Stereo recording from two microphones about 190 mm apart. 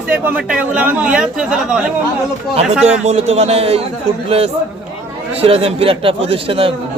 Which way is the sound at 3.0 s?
35° right (ahead or behind).